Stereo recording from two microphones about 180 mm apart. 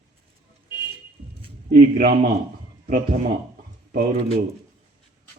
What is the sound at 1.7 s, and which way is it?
Speech, 55° right (ahead or behind).